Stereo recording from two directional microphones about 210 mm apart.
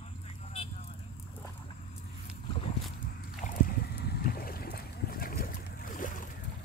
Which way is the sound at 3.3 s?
40° left (ahead or behind).